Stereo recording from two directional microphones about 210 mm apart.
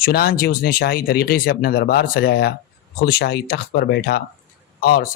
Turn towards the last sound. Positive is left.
turn(degrees=45)  # may be behind; listen again after turning